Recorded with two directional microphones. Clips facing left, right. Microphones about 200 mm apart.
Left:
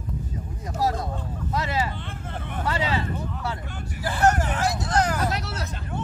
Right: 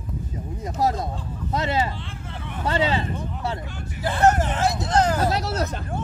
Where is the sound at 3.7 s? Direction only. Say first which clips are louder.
Even; 50° left (ahead or behind).